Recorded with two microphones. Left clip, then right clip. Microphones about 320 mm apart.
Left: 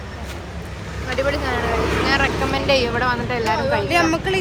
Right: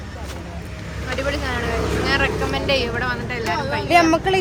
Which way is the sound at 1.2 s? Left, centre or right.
Centre.